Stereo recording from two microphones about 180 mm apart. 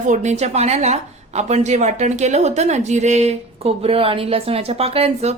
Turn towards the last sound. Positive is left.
turn(degrees=-35)  # may be behind; listen again after turning